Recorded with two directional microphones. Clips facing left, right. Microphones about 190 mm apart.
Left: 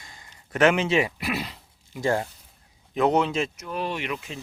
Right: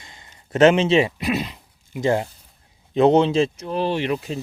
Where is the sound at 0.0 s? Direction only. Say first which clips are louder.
Right 2 dB; 25° right (ahead or behind).